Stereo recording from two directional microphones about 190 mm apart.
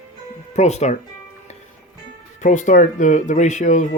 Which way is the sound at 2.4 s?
40° left (ahead or behind).